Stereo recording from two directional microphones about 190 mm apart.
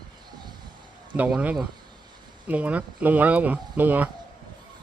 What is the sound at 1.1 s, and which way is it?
Speech, 5° right (ahead or behind).